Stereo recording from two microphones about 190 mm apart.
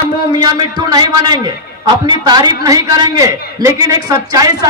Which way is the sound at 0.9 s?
20° right (ahead or behind).